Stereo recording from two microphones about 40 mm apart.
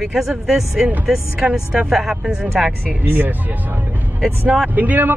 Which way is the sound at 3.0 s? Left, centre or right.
Right.